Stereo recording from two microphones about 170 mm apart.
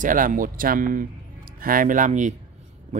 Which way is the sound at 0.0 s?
50° right (ahead or behind).